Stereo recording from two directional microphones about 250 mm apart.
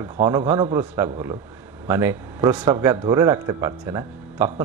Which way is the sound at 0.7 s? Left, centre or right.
Centre.